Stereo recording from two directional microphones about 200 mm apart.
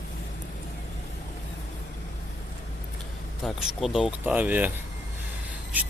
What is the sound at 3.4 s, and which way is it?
Speech, centre (ahead or behind).